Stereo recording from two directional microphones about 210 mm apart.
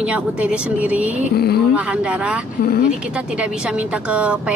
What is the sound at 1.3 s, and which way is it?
Speech, 50° left (ahead or behind).